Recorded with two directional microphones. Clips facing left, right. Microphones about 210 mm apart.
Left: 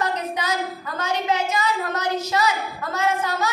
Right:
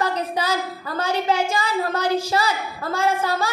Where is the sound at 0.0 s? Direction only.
30° right (ahead or behind).